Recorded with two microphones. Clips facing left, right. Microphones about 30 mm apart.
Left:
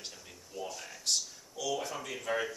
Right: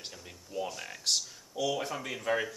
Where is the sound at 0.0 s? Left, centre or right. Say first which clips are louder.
Right 2 dB; centre.